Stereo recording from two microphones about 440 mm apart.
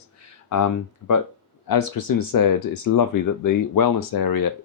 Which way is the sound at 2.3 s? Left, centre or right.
Left.